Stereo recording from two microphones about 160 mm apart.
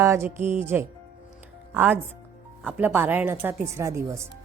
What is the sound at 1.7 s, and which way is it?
A woman's voice, 10° right (ahead or behind).